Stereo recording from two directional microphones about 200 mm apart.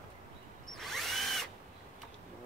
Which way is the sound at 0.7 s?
Centre (ahead or behind).